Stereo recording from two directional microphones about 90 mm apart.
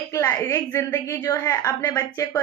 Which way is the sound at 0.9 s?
35° left (ahead or behind).